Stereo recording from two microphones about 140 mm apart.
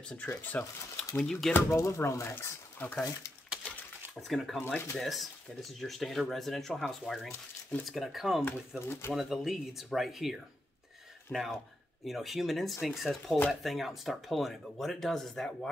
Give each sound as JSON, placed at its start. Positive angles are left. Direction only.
{"t": 0.2, "sound": "speech", "side_deg": 10}
{"t": 1.5, "sound": "speech", "side_deg": 20}
{"t": 3.6, "sound": "a sound", "side_deg": 10}
{"t": 4.2, "sound": "speech", "side_deg": 0}
{"t": 8.5, "sound": "speech", "side_deg": 15}
{"t": 9.1, "sound": "speech", "side_deg": 0}